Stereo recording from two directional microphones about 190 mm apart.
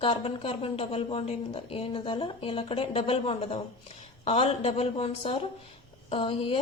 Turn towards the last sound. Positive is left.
turn(degrees=30)  # may be behind; listen again after turning